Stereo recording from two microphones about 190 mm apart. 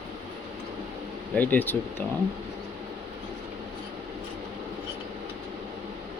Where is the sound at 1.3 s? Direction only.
10° left (ahead or behind).